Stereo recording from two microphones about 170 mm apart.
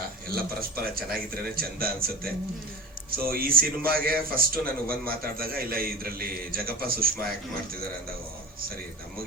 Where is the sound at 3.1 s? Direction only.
60° right (ahead or behind).